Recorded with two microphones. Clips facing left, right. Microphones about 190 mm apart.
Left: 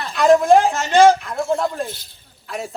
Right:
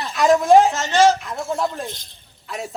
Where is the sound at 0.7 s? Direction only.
55° left (ahead or behind).